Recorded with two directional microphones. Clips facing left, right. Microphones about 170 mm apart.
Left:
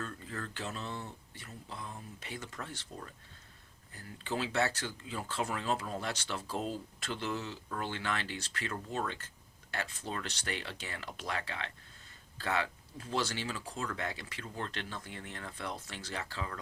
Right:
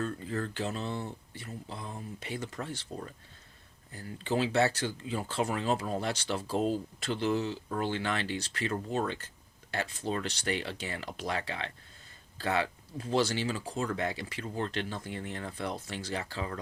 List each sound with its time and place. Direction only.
0.0 s speech: 30° right (ahead or behind)